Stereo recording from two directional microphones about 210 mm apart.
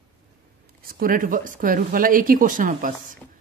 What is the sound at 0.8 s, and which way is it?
Speech, 45° right (ahead or behind).